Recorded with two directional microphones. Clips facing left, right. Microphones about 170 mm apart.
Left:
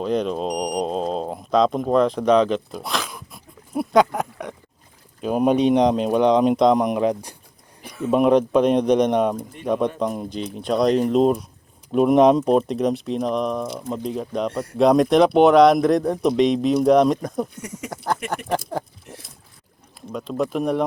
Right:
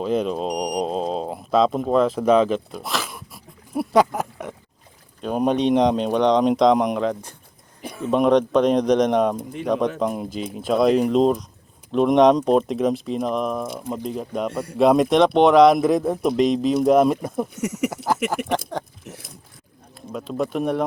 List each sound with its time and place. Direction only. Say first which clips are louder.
0.0 s a sound: even; 5° right (ahead or behind)
5.2 s speech: left 2 dB; 5° left (ahead or behind)
7.0 s speech: left 3 dB; 15° left (ahead or behind); by 17.5 s 5° right (ahead or behind)
17.5 s a sound: right 9 dB; 80° right
17.9 s speech: right 3 dB; 5° right (ahead or behind)
20.1 s speech: left 1 dB; centre (ahead or behind)